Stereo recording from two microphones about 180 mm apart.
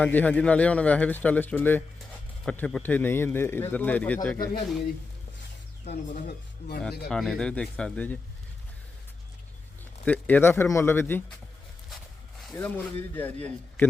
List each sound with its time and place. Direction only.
0.0 s speech: 10° left (ahead or behind)
5.8 s speech: 40° left (ahead or behind)
7.1 s speech: 5° left (ahead or behind)
10.1 s speech: 10° left (ahead or behind)
12.5 s speech: 10° left (ahead or behind)